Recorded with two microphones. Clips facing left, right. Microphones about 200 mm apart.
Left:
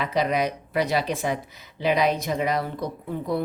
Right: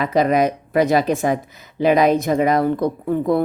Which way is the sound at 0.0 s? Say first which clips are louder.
Right 7 dB; 50° right (ahead or behind).